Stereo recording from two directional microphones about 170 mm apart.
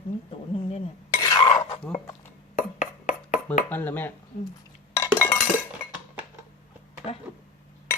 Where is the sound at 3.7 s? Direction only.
10° left (ahead or behind).